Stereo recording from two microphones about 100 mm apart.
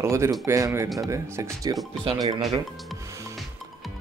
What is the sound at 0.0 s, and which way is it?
Speech, 30° right (ahead or behind).